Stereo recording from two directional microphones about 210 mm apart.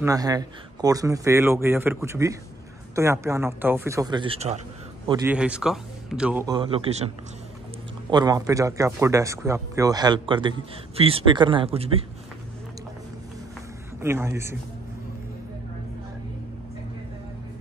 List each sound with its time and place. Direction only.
0.0 s speech: 15° right (ahead or behind)
5.2 s speech: 5° right (ahead or behind)
6.4 s speech: 20° right (ahead or behind)
8.1 s speech: 20° right (ahead or behind)
14.0 s speech: 10° right (ahead or behind)